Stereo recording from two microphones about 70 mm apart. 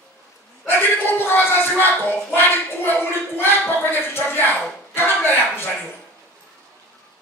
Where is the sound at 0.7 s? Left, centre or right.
Left.